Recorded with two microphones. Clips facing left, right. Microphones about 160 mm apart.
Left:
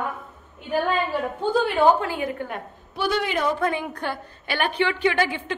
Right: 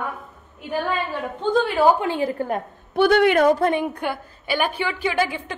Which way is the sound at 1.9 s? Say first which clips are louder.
Right 4 dB; 25° right (ahead or behind).